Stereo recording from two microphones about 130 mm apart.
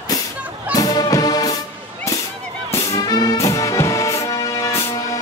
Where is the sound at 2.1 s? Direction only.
25° left (ahead or behind).